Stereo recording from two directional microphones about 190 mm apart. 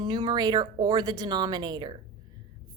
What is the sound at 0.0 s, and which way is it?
Speech, 25° right (ahead or behind).